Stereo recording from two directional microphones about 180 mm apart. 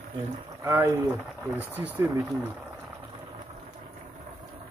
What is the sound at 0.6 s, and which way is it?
Speech, 15° right (ahead or behind).